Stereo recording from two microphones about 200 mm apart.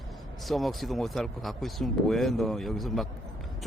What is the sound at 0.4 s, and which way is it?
Speech, centre (ahead or behind).